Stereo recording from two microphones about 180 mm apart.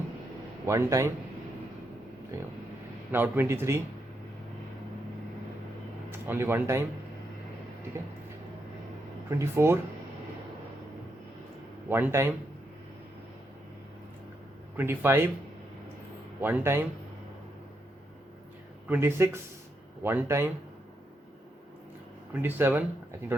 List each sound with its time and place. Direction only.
0.6 s a man's voice: 15° right (ahead or behind)
3.1 s a man's voice: 10° right (ahead or behind)
6.1 s speech: 10° right (ahead or behind)
9.3 s a man's voice: 15° right (ahead or behind)
11.9 s a man's voice: 10° right (ahead or behind)
14.8 s a man's voice: 10° right (ahead or behind)
16.4 s a man's voice: 10° right (ahead or behind)
18.9 s a man's voice: 15° right (ahead or behind)
22.3 s a man's voice: 10° right (ahead or behind)